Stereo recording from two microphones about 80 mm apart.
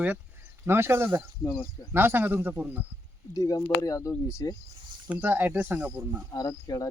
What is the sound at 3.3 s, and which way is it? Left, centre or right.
Speech, left.